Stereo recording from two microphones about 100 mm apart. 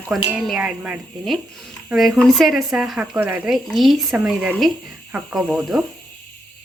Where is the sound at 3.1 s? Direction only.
20° right (ahead or behind).